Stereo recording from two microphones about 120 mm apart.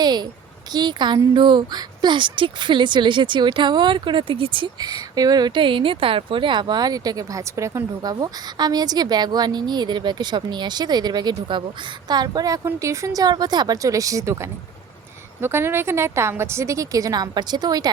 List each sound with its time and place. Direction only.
0.0 s a sound: 35° right (ahead or behind)
0.7 s a woman's voice: 35° right (ahead or behind)
15.4 s a woman's voice: 20° right (ahead or behind)